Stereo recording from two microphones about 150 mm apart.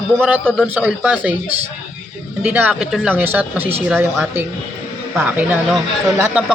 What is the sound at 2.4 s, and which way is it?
Speech, 10° right (ahead or behind).